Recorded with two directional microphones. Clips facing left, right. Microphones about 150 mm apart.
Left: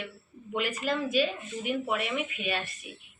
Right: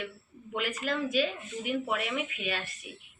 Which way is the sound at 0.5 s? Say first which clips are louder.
Left 2 dB; 10° left (ahead or behind).